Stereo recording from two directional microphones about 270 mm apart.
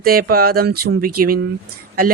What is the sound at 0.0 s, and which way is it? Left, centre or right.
Speech, right.